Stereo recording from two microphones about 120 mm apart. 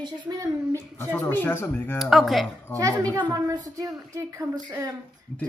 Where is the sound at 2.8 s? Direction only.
30° right (ahead or behind).